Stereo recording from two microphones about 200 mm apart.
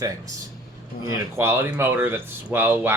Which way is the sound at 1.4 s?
15° right (ahead or behind).